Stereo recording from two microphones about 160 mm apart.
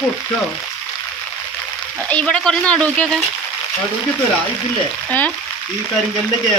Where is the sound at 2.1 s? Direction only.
5° left (ahead or behind).